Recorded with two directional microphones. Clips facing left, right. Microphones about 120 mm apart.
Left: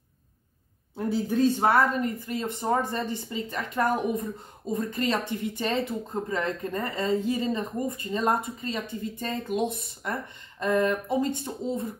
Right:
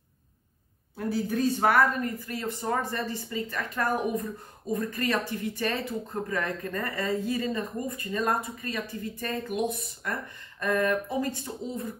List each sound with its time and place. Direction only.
0.9 s speech: 25° left (ahead or behind)